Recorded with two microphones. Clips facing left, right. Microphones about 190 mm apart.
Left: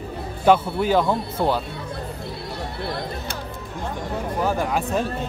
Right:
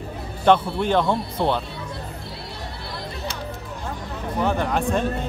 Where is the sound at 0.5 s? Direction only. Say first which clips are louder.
Left 1 dB; 5° left (ahead or behind).